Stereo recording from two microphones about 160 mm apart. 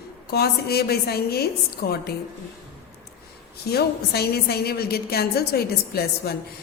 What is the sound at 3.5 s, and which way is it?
A woman's voice, 80° left.